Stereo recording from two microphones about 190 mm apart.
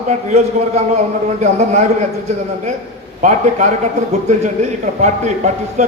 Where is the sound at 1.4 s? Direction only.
35° right (ahead or behind).